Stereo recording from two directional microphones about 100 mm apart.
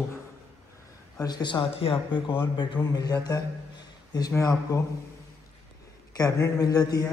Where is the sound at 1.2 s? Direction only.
45° left (ahead or behind).